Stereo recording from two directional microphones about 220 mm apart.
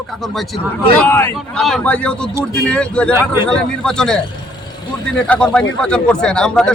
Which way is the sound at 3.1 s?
10° right (ahead or behind).